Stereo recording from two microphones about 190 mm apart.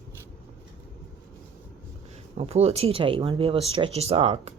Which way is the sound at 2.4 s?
35° right (ahead or behind).